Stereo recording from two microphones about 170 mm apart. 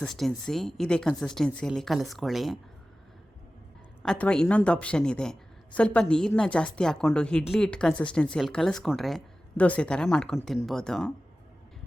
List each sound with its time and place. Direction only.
0.0 s a woman's voice: centre (ahead or behind)
4.0 s a woman's voice: 5° left (ahead or behind)